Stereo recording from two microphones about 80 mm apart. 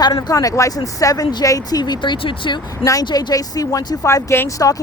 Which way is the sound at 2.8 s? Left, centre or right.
Left.